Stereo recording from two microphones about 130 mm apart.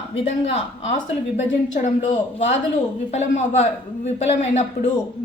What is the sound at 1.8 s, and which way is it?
A woman's voice, 60° left (ahead or behind).